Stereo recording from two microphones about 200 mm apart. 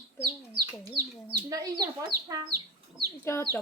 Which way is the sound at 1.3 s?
20° right (ahead or behind).